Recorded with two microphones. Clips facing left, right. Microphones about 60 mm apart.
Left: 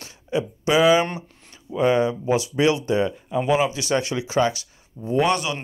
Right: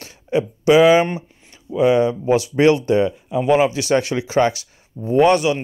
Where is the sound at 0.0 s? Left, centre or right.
Right.